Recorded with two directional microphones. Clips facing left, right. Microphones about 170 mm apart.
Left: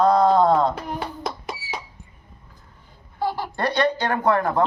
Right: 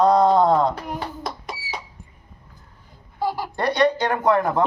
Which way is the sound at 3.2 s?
15° right (ahead or behind).